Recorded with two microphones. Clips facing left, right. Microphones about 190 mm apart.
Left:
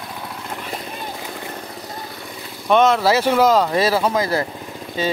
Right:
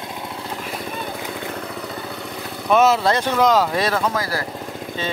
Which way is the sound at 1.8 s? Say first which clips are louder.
Right 3 dB; 65° right (ahead or behind).